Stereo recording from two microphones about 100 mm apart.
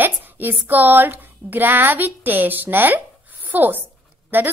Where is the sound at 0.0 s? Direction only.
20° right (ahead or behind).